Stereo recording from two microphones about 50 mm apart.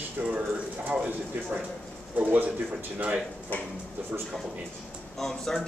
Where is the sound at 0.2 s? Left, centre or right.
Right.